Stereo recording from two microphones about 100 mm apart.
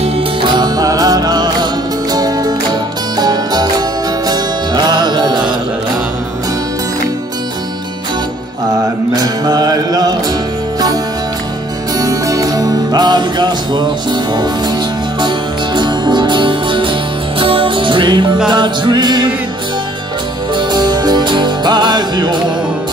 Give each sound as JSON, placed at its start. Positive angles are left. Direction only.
{"t": 0.6, "sound": "music", "side_deg": -40}
{"t": 9.1, "sound": "music", "side_deg": -40}
{"t": 12.0, "sound": "music", "side_deg": -35}
{"t": 20.5, "sound": "music", "side_deg": -50}